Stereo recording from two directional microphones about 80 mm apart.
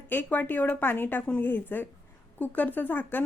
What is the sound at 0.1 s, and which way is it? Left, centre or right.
Speech, left.